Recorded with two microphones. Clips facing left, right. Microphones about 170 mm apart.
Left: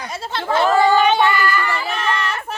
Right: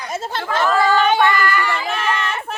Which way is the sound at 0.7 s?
20° left (ahead or behind).